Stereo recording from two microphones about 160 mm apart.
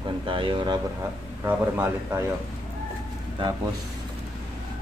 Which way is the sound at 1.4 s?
15° right (ahead or behind).